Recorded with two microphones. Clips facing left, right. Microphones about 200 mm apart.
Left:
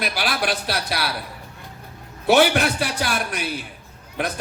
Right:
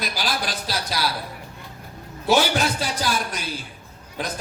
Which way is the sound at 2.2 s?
65° left (ahead or behind).